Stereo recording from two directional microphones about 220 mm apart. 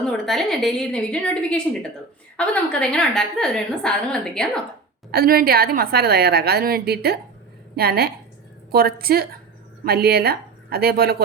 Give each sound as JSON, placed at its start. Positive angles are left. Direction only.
{"t": 0.0, "sound": "a woman's voice", "side_deg": 5}
{"t": 5.1, "sound": "a woman's voice", "side_deg": -40}